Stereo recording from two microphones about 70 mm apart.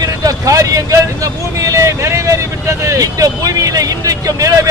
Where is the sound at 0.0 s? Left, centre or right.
Right.